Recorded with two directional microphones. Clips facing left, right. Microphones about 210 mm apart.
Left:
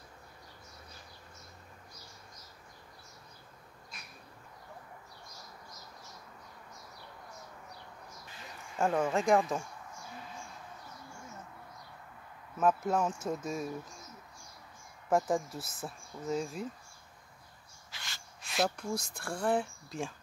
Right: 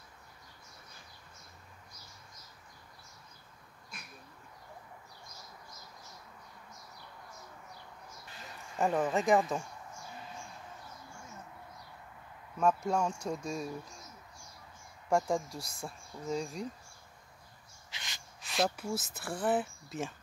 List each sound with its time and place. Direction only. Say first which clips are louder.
8.7 s speech: even; centre (ahead or behind)
12.5 s speech: left 1 dB; 5° left (ahead or behind)
15.0 s speech: left 1 dB; 5° left (ahead or behind)
17.9 s gasp: even; 20° right (ahead or behind)
18.4 s speech: even; centre (ahead or behind)